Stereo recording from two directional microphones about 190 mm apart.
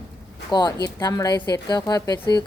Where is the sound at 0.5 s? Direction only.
20° left (ahead or behind).